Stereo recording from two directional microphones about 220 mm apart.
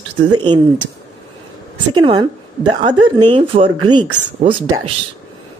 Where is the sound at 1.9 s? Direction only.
20° right (ahead or behind).